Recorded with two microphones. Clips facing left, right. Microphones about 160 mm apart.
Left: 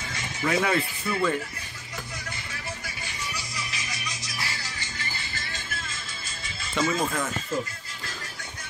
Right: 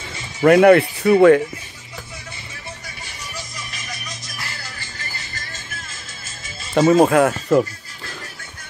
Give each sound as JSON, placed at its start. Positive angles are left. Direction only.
{"t": 0.4, "sound": "speech", "side_deg": -60}
{"t": 3.3, "sound": "music", "side_deg": -50}
{"t": 6.7, "sound": "speech", "side_deg": -45}
{"t": 7.0, "sound": "speech", "side_deg": -70}